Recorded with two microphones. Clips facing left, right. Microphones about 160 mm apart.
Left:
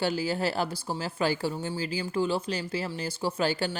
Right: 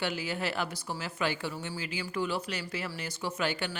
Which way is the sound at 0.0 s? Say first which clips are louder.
Left 5 dB; 35° left (ahead or behind).